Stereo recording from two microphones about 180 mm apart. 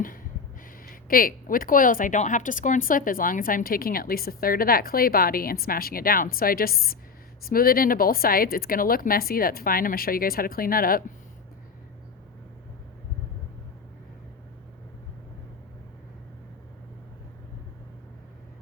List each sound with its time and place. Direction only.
0.9 s speech: 50° left (ahead or behind)